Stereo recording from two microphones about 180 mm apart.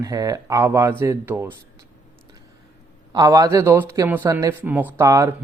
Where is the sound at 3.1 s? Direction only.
20° right (ahead or behind).